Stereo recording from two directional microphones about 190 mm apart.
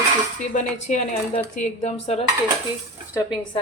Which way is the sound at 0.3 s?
40° left (ahead or behind).